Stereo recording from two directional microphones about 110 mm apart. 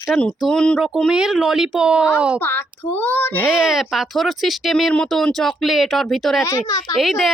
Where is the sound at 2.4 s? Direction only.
20° left (ahead or behind).